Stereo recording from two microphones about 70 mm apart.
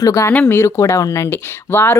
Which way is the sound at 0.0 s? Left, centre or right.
Left.